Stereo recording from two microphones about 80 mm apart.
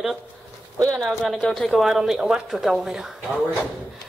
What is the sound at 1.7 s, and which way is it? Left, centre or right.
Speech, centre.